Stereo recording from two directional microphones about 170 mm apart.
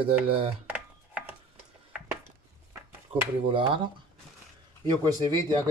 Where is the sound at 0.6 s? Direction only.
10° right (ahead or behind).